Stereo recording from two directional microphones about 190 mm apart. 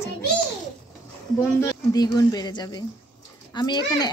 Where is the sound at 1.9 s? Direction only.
20° left (ahead or behind).